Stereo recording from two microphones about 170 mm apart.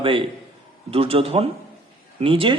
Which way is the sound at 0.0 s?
30° right (ahead or behind).